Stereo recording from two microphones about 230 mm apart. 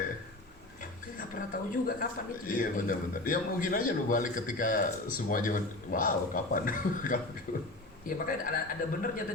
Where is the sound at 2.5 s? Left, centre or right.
Left.